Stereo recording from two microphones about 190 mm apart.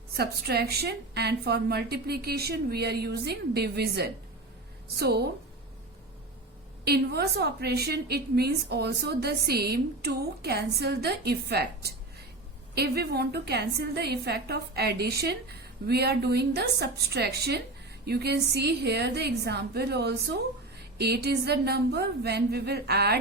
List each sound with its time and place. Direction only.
0.2 s a woman's voice: 55° right (ahead or behind)
6.8 s a woman's voice: 60° right (ahead or behind)